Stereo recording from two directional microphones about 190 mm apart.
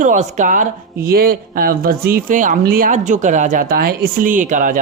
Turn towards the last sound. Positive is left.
turn(degrees=-45)  # may be behind; listen again after turning